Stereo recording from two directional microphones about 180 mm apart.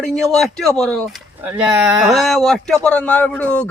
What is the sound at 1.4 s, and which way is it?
Speech, 5° right (ahead or behind).